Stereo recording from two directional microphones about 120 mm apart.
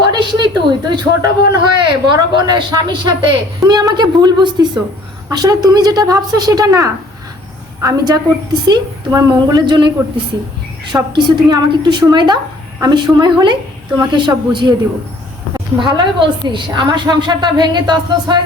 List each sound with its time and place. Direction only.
0.0 s a woman's voice: 40° right (ahead or behind)